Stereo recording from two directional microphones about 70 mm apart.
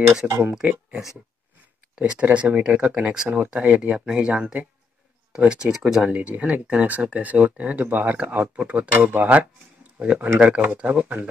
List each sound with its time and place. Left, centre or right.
0.2 s speech: centre
2.0 s speech: centre
6.0 s speech: centre